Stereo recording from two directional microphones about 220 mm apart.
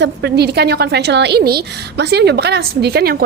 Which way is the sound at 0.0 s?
50° right (ahead or behind).